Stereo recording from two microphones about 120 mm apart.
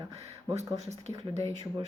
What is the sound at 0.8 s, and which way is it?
Speech, 65° right (ahead or behind).